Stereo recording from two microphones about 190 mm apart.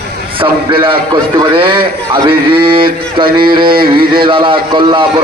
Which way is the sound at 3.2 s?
50° right (ahead or behind).